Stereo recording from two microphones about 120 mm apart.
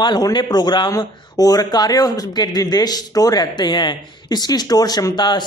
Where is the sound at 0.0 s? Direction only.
35° left (ahead or behind).